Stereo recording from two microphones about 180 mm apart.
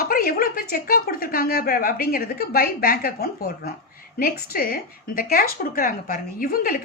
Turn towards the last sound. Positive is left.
turn(degrees=55)  # may be behind; listen again after turning